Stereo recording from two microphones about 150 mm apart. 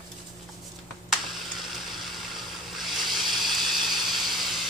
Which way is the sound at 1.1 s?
Centre (ahead or behind).